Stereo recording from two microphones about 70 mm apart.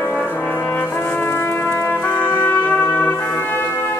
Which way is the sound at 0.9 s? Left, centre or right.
Left.